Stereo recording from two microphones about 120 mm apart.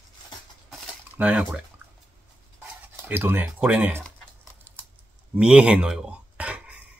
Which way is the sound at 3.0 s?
15° right (ahead or behind).